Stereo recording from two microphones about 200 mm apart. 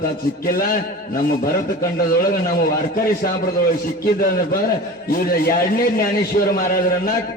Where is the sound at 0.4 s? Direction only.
45° left (ahead or behind).